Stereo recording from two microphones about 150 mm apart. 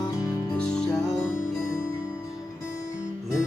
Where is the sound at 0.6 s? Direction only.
5° left (ahead or behind).